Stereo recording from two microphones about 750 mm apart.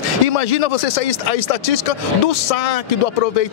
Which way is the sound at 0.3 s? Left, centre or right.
Left.